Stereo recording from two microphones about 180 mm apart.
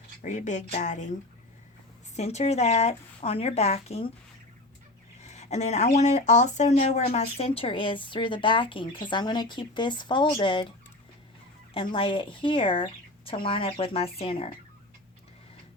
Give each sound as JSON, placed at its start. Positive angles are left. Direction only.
{"t": 0.2, "sound": "speech", "side_deg": 45}
{"t": 2.1, "sound": "speech", "side_deg": 35}
{"t": 5.2, "sound": "speech", "side_deg": 40}
{"t": 11.7, "sound": "speech", "side_deg": 30}